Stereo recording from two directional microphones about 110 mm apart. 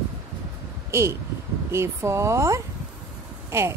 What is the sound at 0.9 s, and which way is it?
A woman's voice, 25° right (ahead or behind).